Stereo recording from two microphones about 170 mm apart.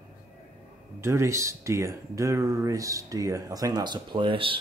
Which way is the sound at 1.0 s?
15° right (ahead or behind).